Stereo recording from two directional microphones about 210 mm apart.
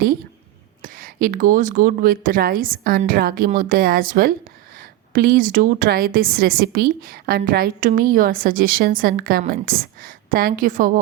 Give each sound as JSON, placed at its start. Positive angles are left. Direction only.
{"t": 0.8, "sound": "a woman's voice", "side_deg": -40}